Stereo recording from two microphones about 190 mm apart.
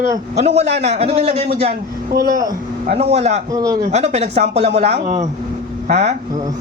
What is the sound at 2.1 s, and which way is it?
Speech, 55° right (ahead or behind).